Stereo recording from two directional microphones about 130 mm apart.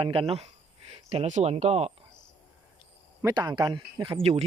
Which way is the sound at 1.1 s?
55° right (ahead or behind).